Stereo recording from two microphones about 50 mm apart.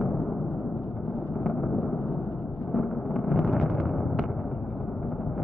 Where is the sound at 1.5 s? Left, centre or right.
Left.